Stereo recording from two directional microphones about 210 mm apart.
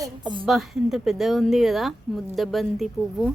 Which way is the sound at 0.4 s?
Centre (ahead or behind).